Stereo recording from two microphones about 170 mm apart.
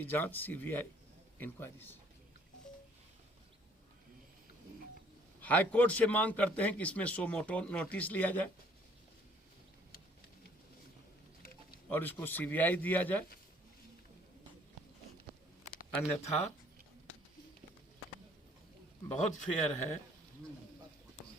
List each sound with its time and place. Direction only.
0.0 s a man's voice: 10° left (ahead or behind)
5.4 s a man's voice: 10° left (ahead or behind)
11.9 s a man's voice: 10° left (ahead or behind)
16.0 s speech: 40° left (ahead or behind)
19.3 s a man's voice: 45° left (ahead or behind)